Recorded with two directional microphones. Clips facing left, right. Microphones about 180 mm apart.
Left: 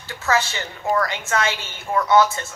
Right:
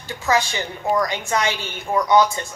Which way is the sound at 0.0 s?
15° right (ahead or behind).